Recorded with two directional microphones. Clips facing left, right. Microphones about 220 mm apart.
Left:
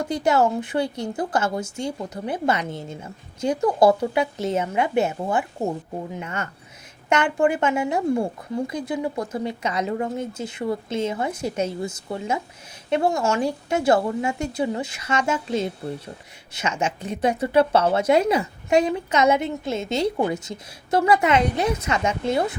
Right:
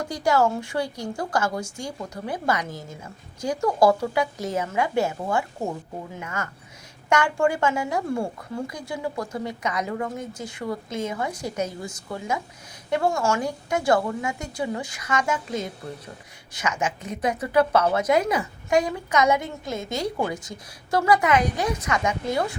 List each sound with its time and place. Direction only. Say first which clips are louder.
0.1 s speech: left 1 dB; 20° left (ahead or behind)
12.9 s speech: left 2 dB; 20° left (ahead or behind)